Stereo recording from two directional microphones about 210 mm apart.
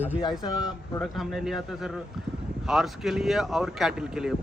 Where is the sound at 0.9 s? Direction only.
Centre (ahead or behind).